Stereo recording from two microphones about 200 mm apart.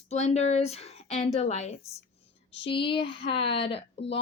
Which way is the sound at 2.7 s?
25° left (ahead or behind).